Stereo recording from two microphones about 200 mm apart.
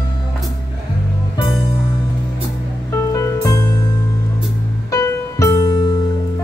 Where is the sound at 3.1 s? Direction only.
15° left (ahead or behind).